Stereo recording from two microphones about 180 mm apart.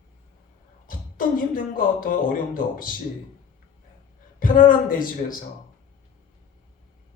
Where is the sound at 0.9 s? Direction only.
50° left (ahead or behind).